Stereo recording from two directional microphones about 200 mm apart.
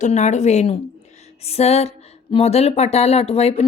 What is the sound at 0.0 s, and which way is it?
A woman's voice, 35° left (ahead or behind).